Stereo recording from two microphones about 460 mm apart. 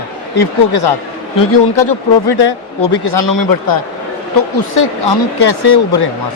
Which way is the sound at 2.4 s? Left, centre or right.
Left.